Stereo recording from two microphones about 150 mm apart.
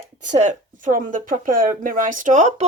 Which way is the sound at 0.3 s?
55° right (ahead or behind).